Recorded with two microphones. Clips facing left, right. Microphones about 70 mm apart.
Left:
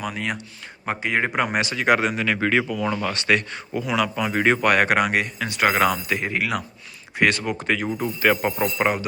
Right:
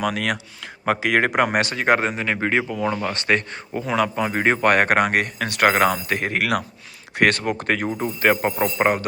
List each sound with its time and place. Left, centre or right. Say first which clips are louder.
0.0 s speech: right 5 dB; right
1.4 s speech: right 3 dB; right
1.8 s speech: left 2 dB; right
7.9 s speech: right 1 dB; right
8.9 s speech: right 4 dB; right